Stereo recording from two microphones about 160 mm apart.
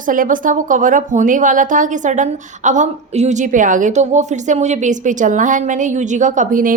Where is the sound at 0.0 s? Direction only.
55° right (ahead or behind).